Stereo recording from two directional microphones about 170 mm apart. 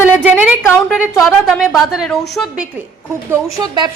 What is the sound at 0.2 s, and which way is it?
A woman's voice, 5° right (ahead or behind).